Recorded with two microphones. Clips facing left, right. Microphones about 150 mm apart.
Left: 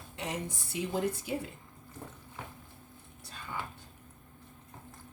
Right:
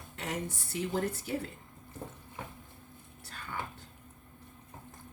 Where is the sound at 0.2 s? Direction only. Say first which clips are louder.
Even; 15° left (ahead or behind).